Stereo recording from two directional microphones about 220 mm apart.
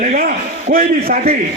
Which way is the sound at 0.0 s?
40° right (ahead or behind).